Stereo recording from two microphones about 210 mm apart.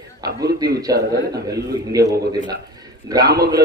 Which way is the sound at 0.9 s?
40° right (ahead or behind).